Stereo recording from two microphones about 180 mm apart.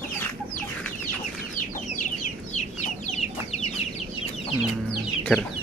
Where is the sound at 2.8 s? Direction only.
40° left (ahead or behind).